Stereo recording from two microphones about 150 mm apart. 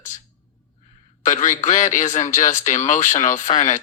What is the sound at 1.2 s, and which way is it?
Speech, 55° left (ahead or behind).